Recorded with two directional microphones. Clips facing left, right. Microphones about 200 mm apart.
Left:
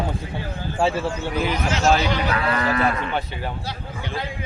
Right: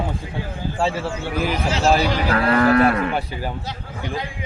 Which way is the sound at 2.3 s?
55° right (ahead or behind).